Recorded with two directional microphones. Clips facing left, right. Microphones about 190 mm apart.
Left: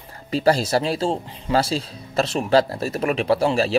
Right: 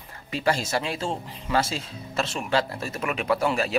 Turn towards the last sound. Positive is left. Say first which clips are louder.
# left 5 dB
turn(degrees=30)  # may be behind; listen again after turning